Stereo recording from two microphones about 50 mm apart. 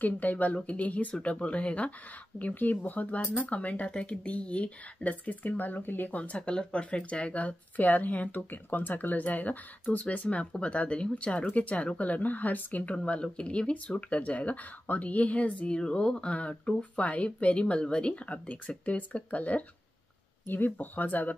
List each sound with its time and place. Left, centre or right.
0.0 s speech: left
6.1 s speech: left
15.7 s speech: centre
20.4 s speech: left